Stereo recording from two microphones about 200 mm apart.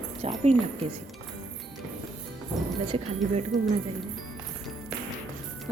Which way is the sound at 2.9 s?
30° right (ahead or behind).